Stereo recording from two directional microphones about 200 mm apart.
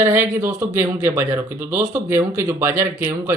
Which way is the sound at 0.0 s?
10° right (ahead or behind).